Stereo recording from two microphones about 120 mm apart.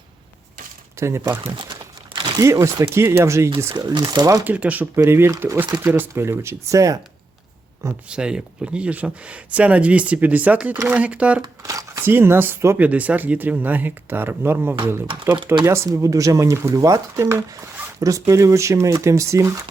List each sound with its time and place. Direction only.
0.9 s speech: 25° right (ahead or behind)
1.7 s a sound: 40° right (ahead or behind)
2.5 s speech: 25° right (ahead or behind)
4.4 s speech: 10° right (ahead or behind)
8.1 s speech: 10° right (ahead or behind)
11.4 s speech: 30° right (ahead or behind)